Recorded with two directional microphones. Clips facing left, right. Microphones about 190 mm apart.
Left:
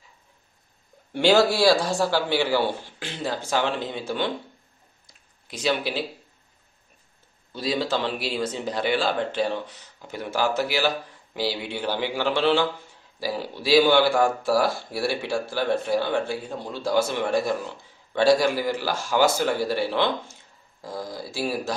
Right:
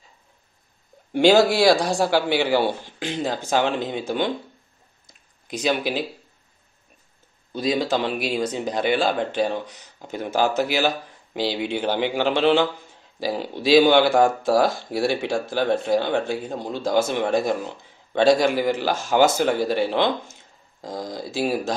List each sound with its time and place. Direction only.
1.1 s speech: 15° right (ahead or behind)
5.0 s a sound: 20° right (ahead or behind)
7.5 s speech: 15° right (ahead or behind)